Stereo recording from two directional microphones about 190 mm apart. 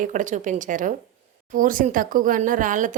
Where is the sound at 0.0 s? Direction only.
40° right (ahead or behind).